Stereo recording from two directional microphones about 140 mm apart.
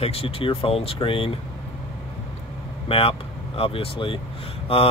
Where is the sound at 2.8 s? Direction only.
40° left (ahead or behind).